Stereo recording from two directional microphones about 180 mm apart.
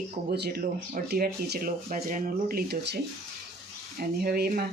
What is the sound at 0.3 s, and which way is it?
Speech, 60° right (ahead or behind).